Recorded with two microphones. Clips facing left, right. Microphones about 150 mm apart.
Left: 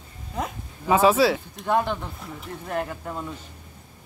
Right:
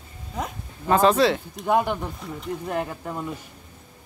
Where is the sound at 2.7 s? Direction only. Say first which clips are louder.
Left 2 dB; 15° right (ahead or behind).